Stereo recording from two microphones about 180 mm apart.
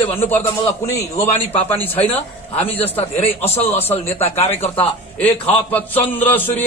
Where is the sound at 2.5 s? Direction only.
35° left (ahead or behind).